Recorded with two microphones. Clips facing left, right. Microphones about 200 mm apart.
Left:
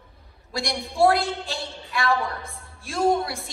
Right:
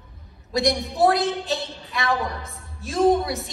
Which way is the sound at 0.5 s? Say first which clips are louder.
Right 5 dB; 20° right (ahead or behind).